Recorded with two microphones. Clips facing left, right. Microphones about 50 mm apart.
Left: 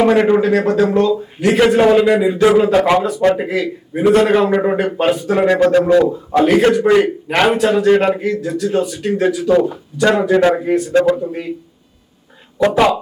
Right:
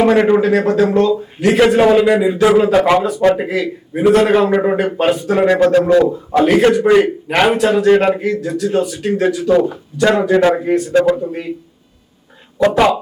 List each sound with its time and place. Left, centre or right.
0.0 s a man's voice: centre
12.7 s a man's voice: centre